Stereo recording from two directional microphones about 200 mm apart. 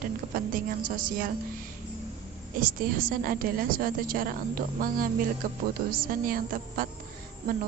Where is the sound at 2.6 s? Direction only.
45° right (ahead or behind).